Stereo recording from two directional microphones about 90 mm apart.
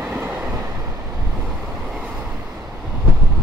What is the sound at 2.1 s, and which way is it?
Train, 15° right (ahead or behind).